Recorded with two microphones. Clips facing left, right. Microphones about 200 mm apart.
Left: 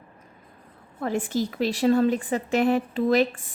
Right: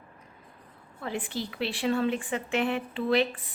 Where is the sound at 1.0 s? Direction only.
45° left (ahead or behind).